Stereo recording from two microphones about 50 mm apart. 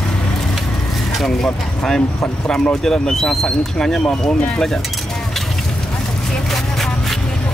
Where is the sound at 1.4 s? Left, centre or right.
Centre.